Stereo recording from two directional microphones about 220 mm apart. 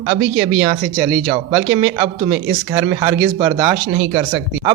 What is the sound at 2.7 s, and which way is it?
Speech, 15° right (ahead or behind).